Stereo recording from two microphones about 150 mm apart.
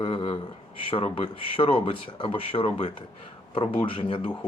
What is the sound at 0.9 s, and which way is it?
Speech, 35° left (ahead or behind).